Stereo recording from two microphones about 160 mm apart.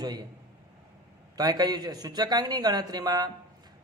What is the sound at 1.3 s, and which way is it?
Speech, 25° right (ahead or behind).